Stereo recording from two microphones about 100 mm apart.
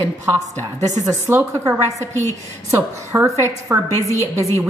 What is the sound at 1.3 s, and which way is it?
A woman's voice, 25° right (ahead or behind).